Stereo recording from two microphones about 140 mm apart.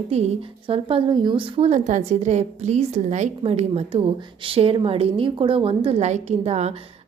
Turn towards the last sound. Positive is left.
turn(degrees=-50)  # may be behind; listen again after turning